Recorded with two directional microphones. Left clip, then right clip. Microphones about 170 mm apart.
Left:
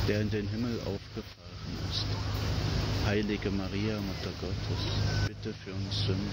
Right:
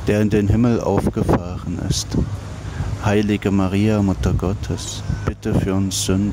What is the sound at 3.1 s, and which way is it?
Speech, 55° right (ahead or behind).